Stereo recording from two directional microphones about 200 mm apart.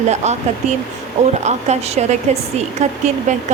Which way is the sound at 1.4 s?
35° right (ahead or behind).